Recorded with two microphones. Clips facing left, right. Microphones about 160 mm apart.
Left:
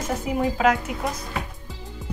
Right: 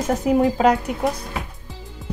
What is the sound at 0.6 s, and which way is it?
Speech, 35° right (ahead or behind).